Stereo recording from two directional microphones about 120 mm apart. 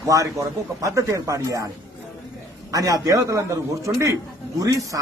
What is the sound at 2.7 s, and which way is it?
Speech, 30° right (ahead or behind).